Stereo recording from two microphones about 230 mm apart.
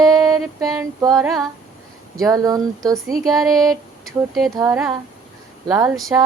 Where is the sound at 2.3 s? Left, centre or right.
Centre.